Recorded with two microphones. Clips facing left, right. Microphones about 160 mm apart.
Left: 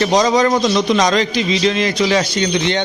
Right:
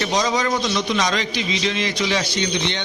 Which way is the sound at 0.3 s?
45° left (ahead or behind).